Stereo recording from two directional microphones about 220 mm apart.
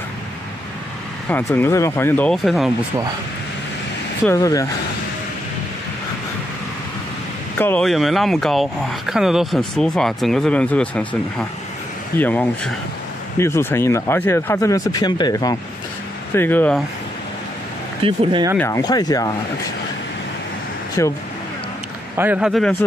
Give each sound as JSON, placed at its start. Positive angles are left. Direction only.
{"t": 1.3, "sound": "speech", "side_deg": 10}
{"t": 4.3, "sound": "speech", "side_deg": 15}
{"t": 7.5, "sound": "speech", "side_deg": 10}
{"t": 18.0, "sound": "speech", "side_deg": -25}
{"t": 18.6, "sound": "speech", "side_deg": 15}
{"t": 21.0, "sound": "speech", "side_deg": 15}
{"t": 22.1, "sound": "speech", "side_deg": -10}